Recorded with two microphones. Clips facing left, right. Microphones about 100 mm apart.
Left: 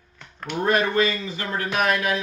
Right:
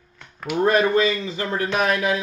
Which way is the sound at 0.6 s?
25° right (ahead or behind).